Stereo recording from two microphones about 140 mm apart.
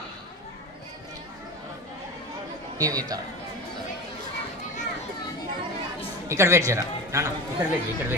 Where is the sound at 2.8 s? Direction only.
25° right (ahead or behind).